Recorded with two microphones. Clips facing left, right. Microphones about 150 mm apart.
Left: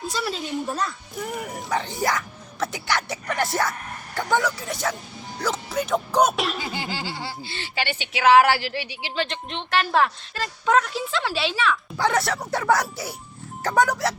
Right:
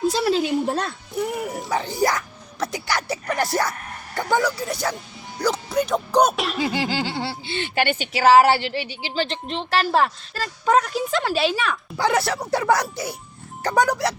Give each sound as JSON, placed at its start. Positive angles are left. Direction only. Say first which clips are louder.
{"t": 0.1, "sound": "speech", "louder": "right 8 dB", "side_deg": -80}
{"t": 1.3, "sound": "speech", "louder": "right 2 dB", "side_deg": -5}
{"t": 6.7, "sound": "speech", "louder": "right 6 dB", "side_deg": -80}
{"t": 11.9, "sound": "speech", "louder": "right 4 dB", "side_deg": 0}